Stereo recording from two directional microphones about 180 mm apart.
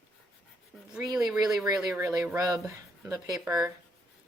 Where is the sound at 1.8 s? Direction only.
15° right (ahead or behind).